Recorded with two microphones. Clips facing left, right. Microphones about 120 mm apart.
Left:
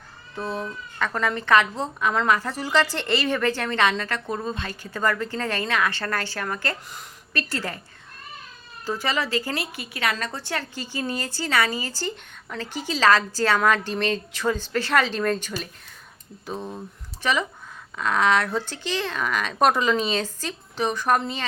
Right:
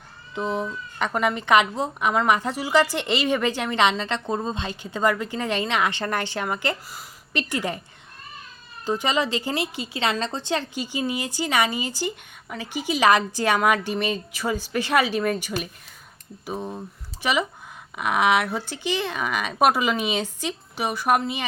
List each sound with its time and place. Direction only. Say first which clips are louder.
0.3 s a woman's voice: right 3 dB; 15° right (ahead or behind)
8.9 s a woman's voice: right 2 dB; 20° right (ahead or behind)